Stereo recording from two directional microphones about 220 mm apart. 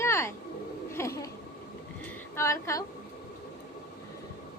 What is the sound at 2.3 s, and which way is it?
Speech, 15° left (ahead or behind).